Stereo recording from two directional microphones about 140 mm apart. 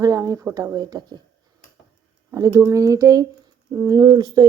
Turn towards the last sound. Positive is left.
turn(degrees=-30)  # may be behind; listen again after turning